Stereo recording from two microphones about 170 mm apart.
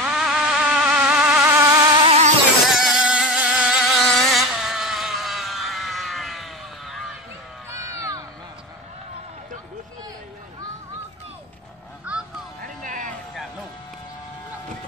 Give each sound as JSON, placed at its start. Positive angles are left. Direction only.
{"t": 0.0, "sound": "vehicle", "side_deg": -5}
{"t": 2.0, "sound": "music", "side_deg": -40}
{"t": 2.7, "sound": "vehicle", "side_deg": -5}
{"t": 7.9, "sound": "a sound", "side_deg": -20}
{"t": 12.6, "sound": "vehicle", "side_deg": -50}